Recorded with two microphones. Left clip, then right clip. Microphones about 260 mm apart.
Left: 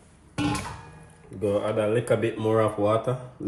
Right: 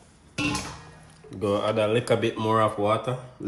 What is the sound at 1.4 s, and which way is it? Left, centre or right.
Speech, right.